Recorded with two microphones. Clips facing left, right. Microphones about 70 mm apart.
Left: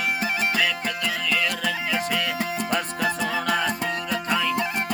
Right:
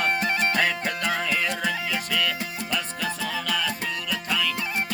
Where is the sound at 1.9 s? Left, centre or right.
Centre.